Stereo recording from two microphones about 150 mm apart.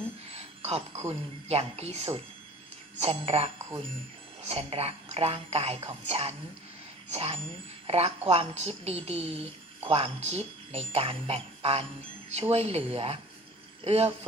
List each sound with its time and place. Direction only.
0.3 s music: 45° right (ahead or behind)
1.0 s a woman's voice: 40° right (ahead or behind)